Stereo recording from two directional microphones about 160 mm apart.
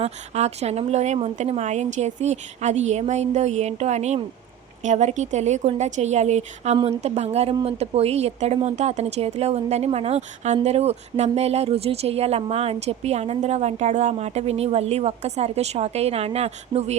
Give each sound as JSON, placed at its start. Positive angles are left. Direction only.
{"t": 0.0, "sound": "speech", "side_deg": -40}